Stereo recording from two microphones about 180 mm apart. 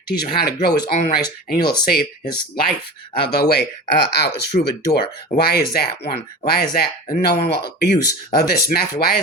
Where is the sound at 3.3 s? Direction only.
60° left (ahead or behind).